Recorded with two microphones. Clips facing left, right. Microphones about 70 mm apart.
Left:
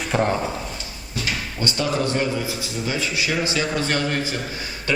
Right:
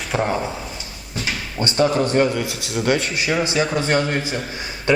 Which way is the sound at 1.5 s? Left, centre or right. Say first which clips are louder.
Right 6 dB; right.